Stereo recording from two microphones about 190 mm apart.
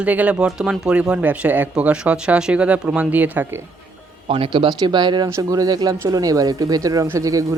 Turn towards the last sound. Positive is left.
turn(degrees=-15)  # may be behind; listen again after turning